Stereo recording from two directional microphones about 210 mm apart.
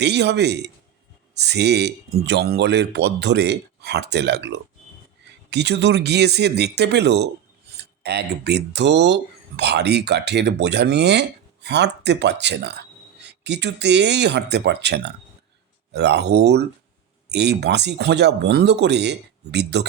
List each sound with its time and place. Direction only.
0.0 s speech: 55° right (ahead or behind)